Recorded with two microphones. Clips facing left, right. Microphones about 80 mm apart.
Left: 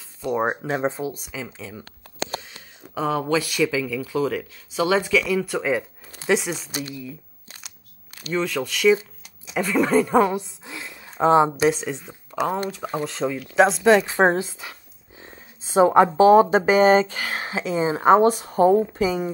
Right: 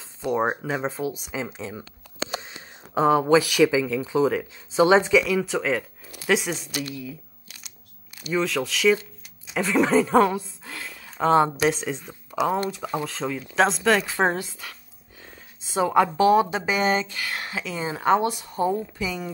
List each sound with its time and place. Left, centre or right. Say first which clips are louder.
0.3 s a woman's voice: left 1 dB; centre
0.8 s a woman's voice: left 3 dB; centre
1.3 s speech: right 3 dB; right
5.2 s a woman's voice: left 1 dB; centre
6.7 s a woman's voice: even; left
8.2 s a woman's voice: even; centre
10.3 s a sound: left 2 dB; centre
11.7 s speech: left 1 dB; centre
12.8 s a woman's voice: left 1 dB; left
13.1 s speech: left 3 dB; centre
13.9 s a woman's voice: left 5 dB; left
18.2 s speech: left 7 dB; left